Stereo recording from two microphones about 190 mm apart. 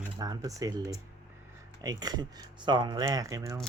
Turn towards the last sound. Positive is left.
turn(degrees=-15)  # may be behind; listen again after turning